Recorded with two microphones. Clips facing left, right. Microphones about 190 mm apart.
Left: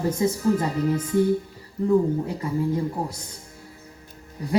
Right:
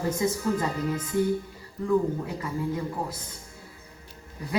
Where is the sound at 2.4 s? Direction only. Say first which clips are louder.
Left 5 dB; 30° left (ahead or behind).